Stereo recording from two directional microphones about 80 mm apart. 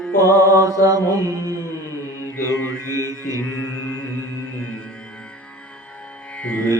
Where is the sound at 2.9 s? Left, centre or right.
Right.